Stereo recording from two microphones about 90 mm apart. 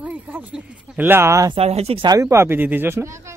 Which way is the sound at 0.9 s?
25° right (ahead or behind).